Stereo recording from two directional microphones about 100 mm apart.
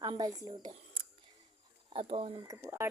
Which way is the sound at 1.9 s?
70° right (ahead or behind).